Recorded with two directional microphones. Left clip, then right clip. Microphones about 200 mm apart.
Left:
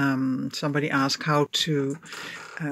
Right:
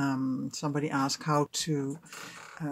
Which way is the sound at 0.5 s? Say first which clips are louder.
Left 6 dB; 5° left (ahead or behind).